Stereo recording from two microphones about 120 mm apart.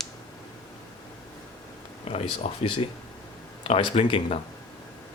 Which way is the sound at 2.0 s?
55° left (ahead or behind).